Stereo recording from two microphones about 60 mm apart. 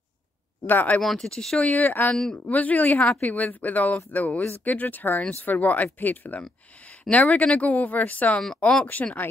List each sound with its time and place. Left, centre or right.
0.7 s speech: left
1.0 s speech: centre
1.7 s speech: left
8.4 s speech: centre
9.0 s speech: left